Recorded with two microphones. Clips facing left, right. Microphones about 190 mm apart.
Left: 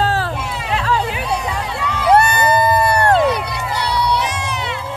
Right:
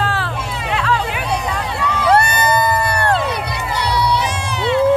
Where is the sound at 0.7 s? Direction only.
35° left (ahead or behind).